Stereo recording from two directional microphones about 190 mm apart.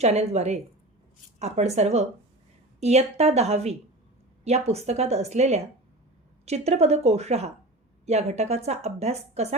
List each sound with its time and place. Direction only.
0.0 s a woman's voice: 35° right (ahead or behind)